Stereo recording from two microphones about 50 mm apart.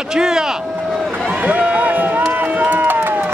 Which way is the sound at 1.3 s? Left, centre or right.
Right.